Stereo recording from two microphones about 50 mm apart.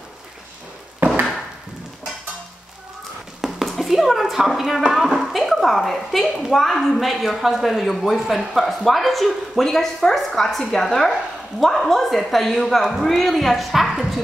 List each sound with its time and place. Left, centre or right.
0.9 s chop: right
3.3 s a sound: centre
3.6 s speech: centre